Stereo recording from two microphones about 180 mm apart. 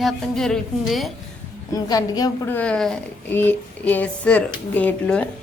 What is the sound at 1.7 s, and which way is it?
Speech, 20° left (ahead or behind).